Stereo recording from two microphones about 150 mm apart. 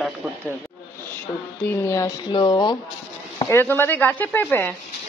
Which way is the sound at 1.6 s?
15° left (ahead or behind).